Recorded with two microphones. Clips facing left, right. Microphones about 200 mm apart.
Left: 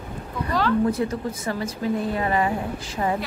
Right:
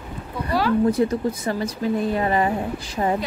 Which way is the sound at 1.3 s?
35° right (ahead or behind).